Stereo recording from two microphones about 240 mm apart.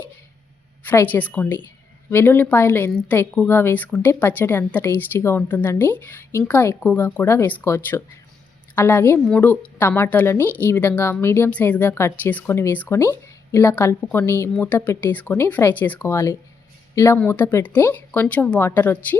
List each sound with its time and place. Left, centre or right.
0.9 s a woman's voice: centre